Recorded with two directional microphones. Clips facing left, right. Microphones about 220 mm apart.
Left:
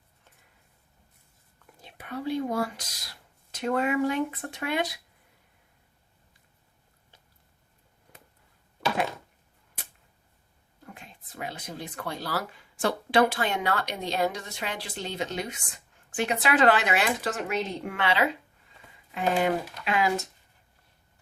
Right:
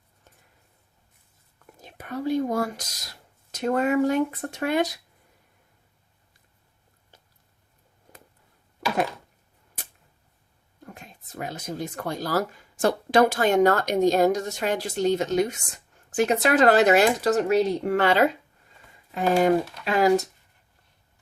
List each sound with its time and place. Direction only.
1.8 s speech: 45° right (ahead or behind)
10.8 s speech: 45° right (ahead or behind)